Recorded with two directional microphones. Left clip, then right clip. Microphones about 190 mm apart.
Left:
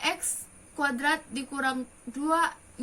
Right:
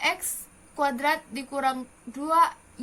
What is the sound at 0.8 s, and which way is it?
A child's voice, 30° right (ahead or behind).